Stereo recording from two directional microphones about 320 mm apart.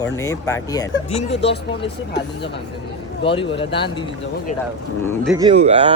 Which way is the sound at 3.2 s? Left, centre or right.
Centre.